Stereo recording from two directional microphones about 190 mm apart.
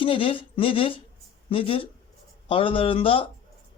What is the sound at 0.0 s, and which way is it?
A man's voice, 30° left (ahead or behind).